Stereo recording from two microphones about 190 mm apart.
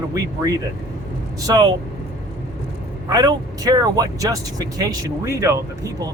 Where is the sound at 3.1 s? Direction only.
20° right (ahead or behind).